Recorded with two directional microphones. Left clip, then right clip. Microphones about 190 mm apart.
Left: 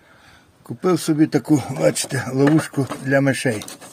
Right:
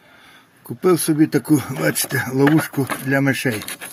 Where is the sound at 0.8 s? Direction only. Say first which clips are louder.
Right 2 dB; centre (ahead or behind).